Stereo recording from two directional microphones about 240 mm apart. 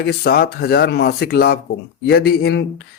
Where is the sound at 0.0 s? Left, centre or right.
Left.